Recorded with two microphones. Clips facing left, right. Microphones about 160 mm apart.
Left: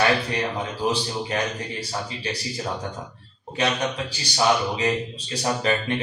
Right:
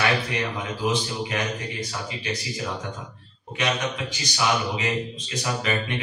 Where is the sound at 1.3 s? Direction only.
30° left (ahead or behind).